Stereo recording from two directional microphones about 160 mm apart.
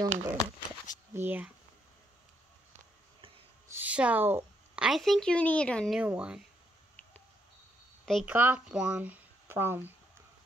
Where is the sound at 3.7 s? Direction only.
10° right (ahead or behind).